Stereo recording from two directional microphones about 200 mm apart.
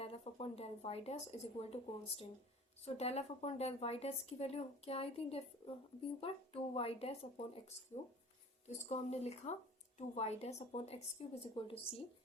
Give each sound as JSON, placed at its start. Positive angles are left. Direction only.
{"t": 0.0, "sound": "speech", "side_deg": 30}